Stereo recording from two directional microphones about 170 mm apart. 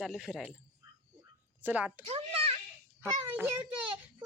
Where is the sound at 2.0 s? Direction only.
40° right (ahead or behind).